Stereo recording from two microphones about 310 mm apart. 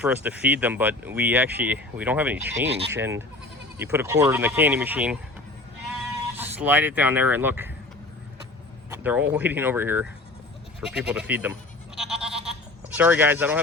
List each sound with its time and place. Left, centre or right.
0.0 s speech: centre
2.6 s speech: right
2.9 s speech: centre
6.3 s speech: centre
8.9 s speech: centre
11.9 s bleat: centre